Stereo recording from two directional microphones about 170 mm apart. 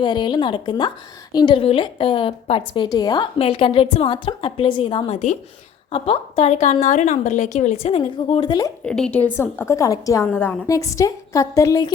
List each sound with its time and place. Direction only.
0.0 s a woman's voice: 25° left (ahead or behind)
3.3 s a woman's voice: 35° left (ahead or behind)
8.8 s a woman's voice: 5° left (ahead or behind); by 11.9 s 20° left (ahead or behind)